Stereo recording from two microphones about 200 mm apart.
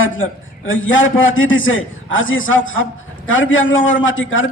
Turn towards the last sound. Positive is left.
turn(degrees=75)  # may be behind; listen again after turning